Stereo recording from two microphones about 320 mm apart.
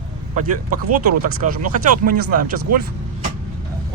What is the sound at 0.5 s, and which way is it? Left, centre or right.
Speech, right.